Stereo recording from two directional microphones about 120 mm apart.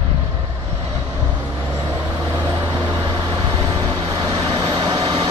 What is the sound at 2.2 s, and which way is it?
Vehicle, 20° right (ahead or behind).